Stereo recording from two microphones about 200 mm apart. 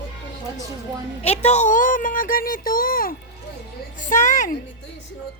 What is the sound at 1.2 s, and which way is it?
A woman's voice, 30° left (ahead or behind).